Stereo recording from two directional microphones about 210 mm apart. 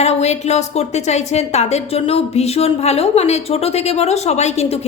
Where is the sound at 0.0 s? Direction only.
30° left (ahead or behind).